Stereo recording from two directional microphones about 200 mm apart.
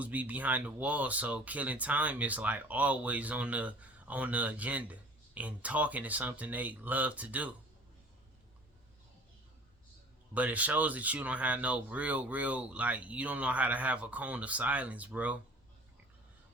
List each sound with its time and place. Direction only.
0.0 s speech: 10° right (ahead or behind)
10.3 s speech: 5° right (ahead or behind)